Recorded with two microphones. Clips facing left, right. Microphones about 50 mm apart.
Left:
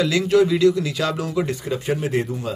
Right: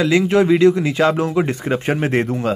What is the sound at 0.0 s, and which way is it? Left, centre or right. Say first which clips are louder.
Speech: right 2 dB; right.